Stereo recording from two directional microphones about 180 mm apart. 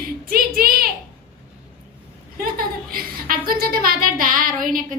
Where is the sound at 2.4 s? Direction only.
55° right (ahead or behind).